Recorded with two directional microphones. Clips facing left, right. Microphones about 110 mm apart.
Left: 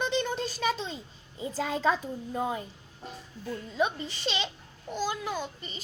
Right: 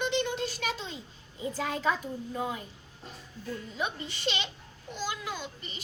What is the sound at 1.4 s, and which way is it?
A child's voice, 30° left (ahead or behind).